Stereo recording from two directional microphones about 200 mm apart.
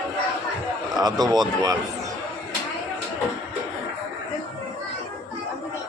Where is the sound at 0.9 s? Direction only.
20° right (ahead or behind).